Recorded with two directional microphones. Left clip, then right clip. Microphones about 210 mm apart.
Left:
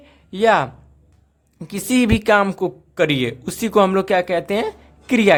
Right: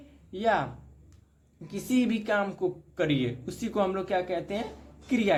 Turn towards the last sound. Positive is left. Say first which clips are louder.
# left 12 dB
turn(degrees=45)  # may be behind; listen again after turning